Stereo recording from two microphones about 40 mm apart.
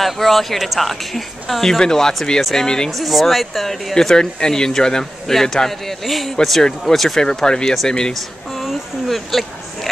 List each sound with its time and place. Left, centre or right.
0.0 s speech: centre
2.9 s speech: centre
3.9 s speech: centre
7.2 s speech: centre
8.6 s speech: centre